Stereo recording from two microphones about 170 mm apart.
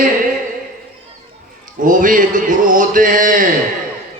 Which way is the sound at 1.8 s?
50° right (ahead or behind).